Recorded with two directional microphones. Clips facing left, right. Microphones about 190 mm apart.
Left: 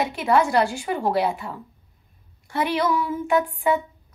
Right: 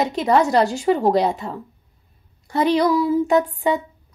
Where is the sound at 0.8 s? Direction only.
40° right (ahead or behind).